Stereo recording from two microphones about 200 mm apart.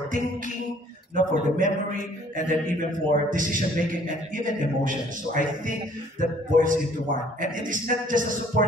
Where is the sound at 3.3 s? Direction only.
40° right (ahead or behind).